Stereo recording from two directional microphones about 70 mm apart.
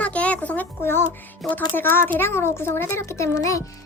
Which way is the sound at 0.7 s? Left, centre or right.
Left.